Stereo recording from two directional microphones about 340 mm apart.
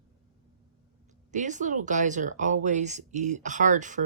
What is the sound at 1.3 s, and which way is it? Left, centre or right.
Speech, right.